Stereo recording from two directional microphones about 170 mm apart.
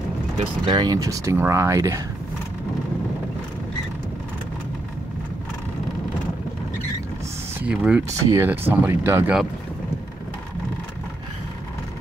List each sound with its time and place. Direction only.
0.4 s speech: 30° right (ahead or behind)
7.5 s speech: 5° right (ahead or behind)